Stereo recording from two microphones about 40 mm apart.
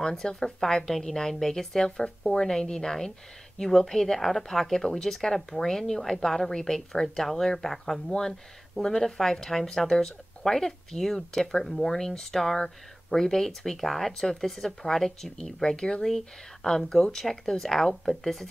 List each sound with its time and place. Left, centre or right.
0.0 s speech: centre